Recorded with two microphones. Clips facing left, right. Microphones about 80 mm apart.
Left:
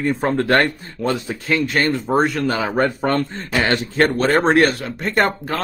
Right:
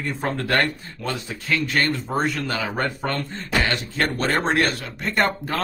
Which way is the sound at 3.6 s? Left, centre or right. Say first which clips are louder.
Left 7 dB; left.